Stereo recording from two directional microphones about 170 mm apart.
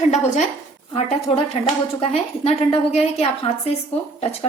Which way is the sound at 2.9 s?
35° left (ahead or behind).